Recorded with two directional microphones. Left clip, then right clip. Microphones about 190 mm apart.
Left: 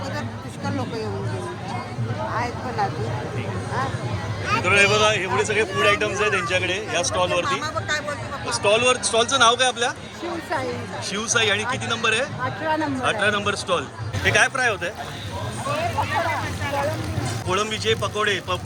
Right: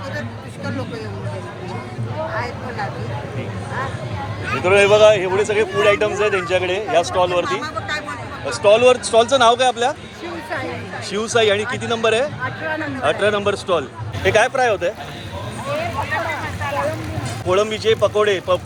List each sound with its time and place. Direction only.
2.3 s a sound: 35° left (ahead or behind)
4.6 s speech: 10° left (ahead or behind)
7.4 s speech: 60° left (ahead or behind)
8.4 s speech: 15° left (ahead or behind)
11.1 s speech: 10° left (ahead or behind)
17.5 s speech: 5° left (ahead or behind)